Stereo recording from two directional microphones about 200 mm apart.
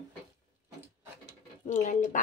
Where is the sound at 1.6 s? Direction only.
40° left (ahead or behind).